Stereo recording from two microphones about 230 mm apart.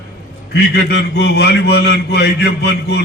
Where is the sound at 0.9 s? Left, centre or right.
Left.